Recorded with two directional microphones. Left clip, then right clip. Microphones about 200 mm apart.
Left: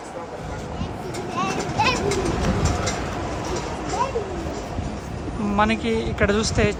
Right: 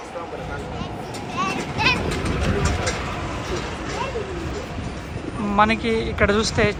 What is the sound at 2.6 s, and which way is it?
Vehicle, 50° left (ahead or behind).